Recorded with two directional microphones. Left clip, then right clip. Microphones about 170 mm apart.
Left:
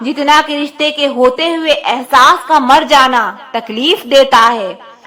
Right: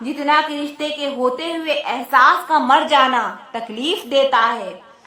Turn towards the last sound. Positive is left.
turn(degrees=35)  # may be behind; listen again after turning